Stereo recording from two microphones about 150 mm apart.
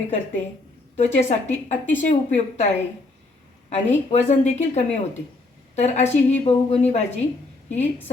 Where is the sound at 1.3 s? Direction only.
50° left (ahead or behind).